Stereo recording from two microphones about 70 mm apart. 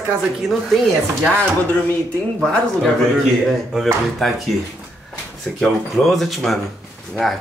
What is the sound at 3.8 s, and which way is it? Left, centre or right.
Speech, centre.